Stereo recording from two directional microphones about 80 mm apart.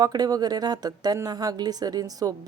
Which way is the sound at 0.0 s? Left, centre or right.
Right.